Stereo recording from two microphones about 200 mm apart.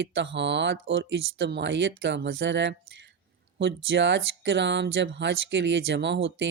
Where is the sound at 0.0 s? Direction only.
65° right (ahead or behind).